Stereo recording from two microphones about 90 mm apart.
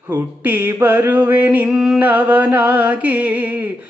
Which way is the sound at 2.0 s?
20° right (ahead or behind).